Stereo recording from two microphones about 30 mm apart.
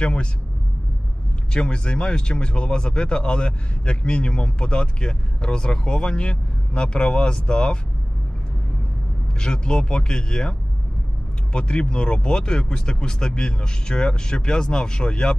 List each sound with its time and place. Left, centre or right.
0.0 s speech: left
1.5 s speech: left
9.4 s speech: left
11.5 s speech: left